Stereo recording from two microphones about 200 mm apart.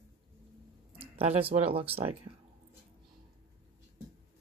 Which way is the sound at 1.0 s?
30° right (ahead or behind).